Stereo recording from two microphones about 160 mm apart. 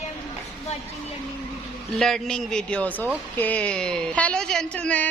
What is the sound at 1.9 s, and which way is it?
A woman's voice, 5° left (ahead or behind).